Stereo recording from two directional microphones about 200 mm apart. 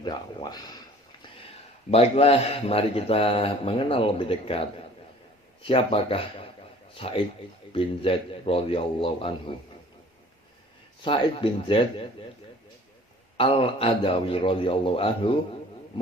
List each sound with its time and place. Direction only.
0.0 s a man's voice: 25° left (ahead or behind)
1.9 s a man's voice: 30° left (ahead or behind)
5.6 s a man's voice: 25° left (ahead or behind)
11.0 s a man's voice: 25° left (ahead or behind)
13.3 s a man's voice: 30° left (ahead or behind)